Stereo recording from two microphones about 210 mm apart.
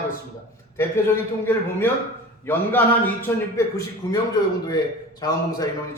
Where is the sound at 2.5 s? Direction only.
10° left (ahead or behind).